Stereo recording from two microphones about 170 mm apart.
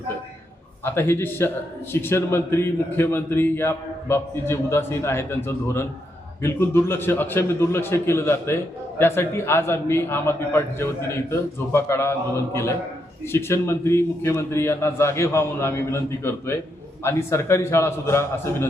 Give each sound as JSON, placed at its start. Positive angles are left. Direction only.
{"t": 0.9, "sound": "a man's voice", "side_deg": 15}
{"t": 13.3, "sound": "a man's voice", "side_deg": 15}